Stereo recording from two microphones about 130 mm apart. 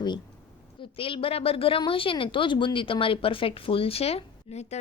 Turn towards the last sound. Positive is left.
turn(degrees=55)  # may be behind; listen again after turning